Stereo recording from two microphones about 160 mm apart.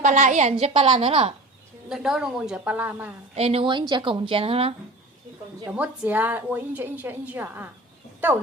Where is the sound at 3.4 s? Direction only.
35° right (ahead or behind).